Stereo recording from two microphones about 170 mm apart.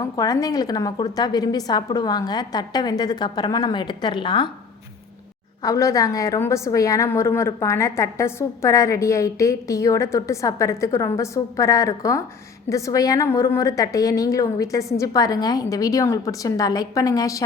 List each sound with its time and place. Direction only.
0.0 s a woman's voice: 20° left (ahead or behind)
5.6 s a woman's voice: 20° left (ahead or behind)